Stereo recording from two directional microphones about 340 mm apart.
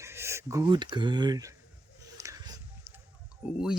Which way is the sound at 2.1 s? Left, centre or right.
Centre.